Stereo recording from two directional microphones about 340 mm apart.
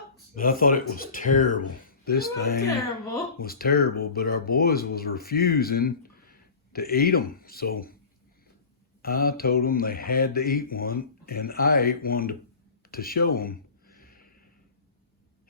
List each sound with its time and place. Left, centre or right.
0.3 s mantra: left
9.0 s mantra: left
12.9 s a sound: left